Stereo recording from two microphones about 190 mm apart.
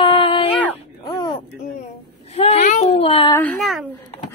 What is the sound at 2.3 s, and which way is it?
Child singing, 35° left (ahead or behind).